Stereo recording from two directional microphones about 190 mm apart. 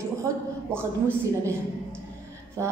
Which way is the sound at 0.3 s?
15° right (ahead or behind).